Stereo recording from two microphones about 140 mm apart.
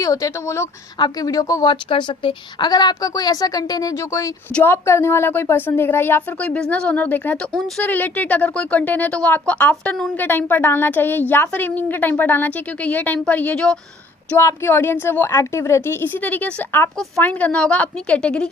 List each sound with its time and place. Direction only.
0.0 s speech: 25° left (ahead or behind)
1.7 s speech: 35° left (ahead or behind); by 18.4 s 5° left (ahead or behind)